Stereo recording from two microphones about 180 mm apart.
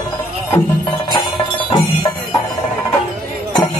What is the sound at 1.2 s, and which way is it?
Music, 25° left (ahead or behind).